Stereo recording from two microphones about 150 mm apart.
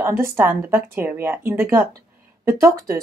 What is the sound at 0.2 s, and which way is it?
Speech, 15° right (ahead or behind).